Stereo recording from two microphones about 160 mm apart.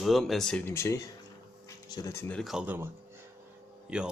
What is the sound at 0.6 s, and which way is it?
Speech, 15° left (ahead or behind).